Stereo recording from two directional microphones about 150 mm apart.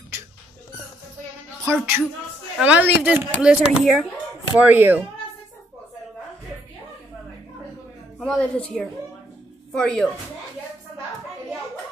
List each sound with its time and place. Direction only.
1.7 s a woman's voice: 15° right (ahead or behind)
8.2 s a woman's voice: 5° left (ahead or behind)